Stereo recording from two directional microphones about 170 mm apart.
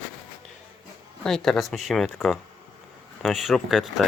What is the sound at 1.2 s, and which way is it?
Speech, 5° left (ahead or behind).